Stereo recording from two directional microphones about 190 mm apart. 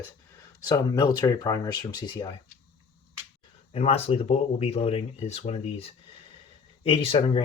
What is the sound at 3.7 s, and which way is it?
Speech, 30° left (ahead or behind).